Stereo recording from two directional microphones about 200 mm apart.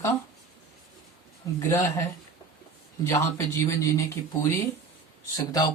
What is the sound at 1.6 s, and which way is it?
Speech, 15° left (ahead or behind).